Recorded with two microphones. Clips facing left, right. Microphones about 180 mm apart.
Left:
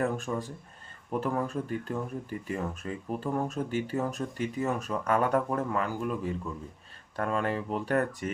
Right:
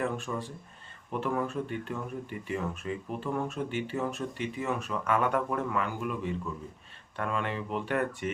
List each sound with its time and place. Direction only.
0.0 s speech: 40° left (ahead or behind)